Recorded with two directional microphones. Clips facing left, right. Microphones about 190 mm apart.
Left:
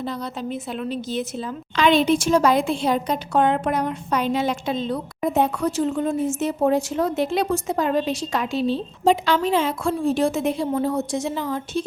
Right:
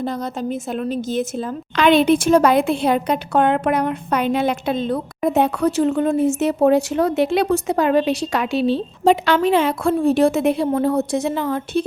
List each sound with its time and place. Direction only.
0.0 s a woman's voice: 45° right (ahead or behind); by 11.9 s 60° right (ahead or behind)